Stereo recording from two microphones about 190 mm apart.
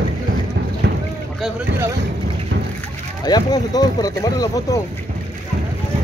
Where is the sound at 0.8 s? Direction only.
65° right (ahead or behind).